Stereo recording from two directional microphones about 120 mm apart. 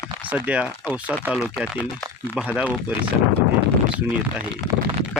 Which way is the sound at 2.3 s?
10° right (ahead or behind).